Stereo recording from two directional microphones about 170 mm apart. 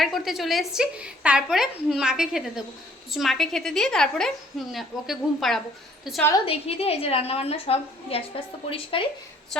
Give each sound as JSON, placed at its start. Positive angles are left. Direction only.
{"t": 0.0, "sound": "a woman's voice", "side_deg": 0}
{"t": 6.4, "sound": "a woman's voice", "side_deg": 35}